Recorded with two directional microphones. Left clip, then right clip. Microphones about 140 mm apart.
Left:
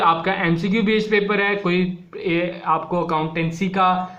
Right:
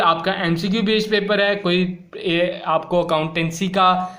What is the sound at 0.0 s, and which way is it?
Speech, 10° right (ahead or behind).